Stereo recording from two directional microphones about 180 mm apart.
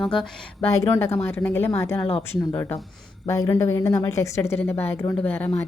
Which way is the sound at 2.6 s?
10° left (ahead or behind).